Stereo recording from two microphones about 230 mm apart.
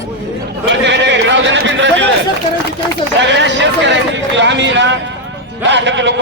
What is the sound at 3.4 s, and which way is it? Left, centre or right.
A man's voice, right.